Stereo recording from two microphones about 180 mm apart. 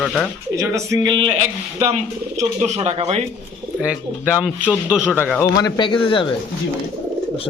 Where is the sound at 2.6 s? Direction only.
35° right (ahead or behind).